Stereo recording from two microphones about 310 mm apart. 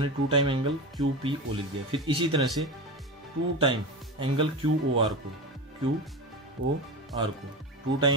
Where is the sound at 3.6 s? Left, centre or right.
Centre.